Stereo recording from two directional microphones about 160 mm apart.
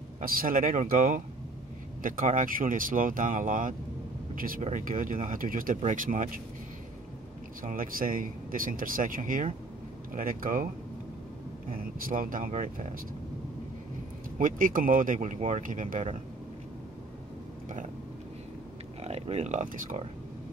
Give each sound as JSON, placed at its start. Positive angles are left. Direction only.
{"t": 0.2, "sound": "speech", "side_deg": -65}
{"t": 7.6, "sound": "speech", "side_deg": -60}
{"t": 11.7, "sound": "speech", "side_deg": -60}
{"t": 14.4, "sound": "speech", "side_deg": -60}
{"t": 19.0, "sound": "speech", "side_deg": -40}